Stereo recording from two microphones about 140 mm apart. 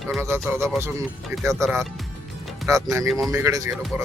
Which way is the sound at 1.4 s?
20° right (ahead or behind).